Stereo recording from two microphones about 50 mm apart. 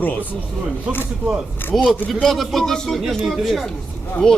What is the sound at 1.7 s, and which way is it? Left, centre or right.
Speech, centre.